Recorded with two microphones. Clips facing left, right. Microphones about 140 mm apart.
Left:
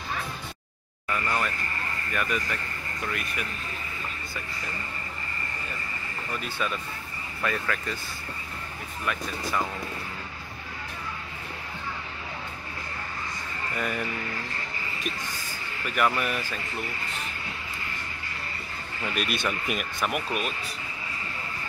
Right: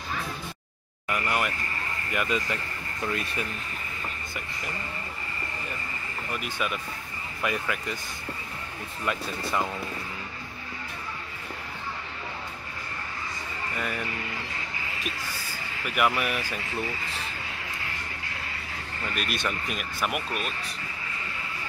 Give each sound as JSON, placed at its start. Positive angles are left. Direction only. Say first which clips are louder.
{"t": 1.0, "sound": "speech", "louder": "right 1 dB", "side_deg": -15}
{"t": 6.3, "sound": "speech", "louder": "even", "side_deg": -10}
{"t": 9.0, "sound": "speech", "louder": "right 1 dB", "side_deg": -25}
{"t": 13.7, "sound": "speech", "louder": "left 2 dB", "side_deg": 0}
{"t": 15.8, "sound": "speech", "louder": "even", "side_deg": -10}
{"t": 19.1, "sound": "speech", "louder": "left 2 dB", "side_deg": 0}